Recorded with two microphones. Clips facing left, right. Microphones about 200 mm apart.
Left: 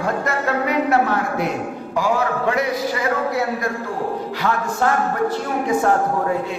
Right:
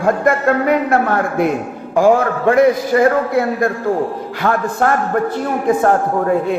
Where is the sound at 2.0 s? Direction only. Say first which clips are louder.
Right 8 dB; 50° right (ahead or behind).